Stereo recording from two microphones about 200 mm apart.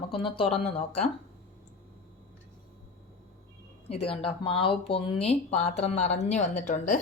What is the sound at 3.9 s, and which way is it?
Speech, 30° left (ahead or behind).